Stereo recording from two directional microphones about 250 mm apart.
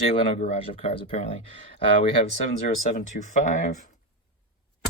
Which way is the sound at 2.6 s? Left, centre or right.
Left.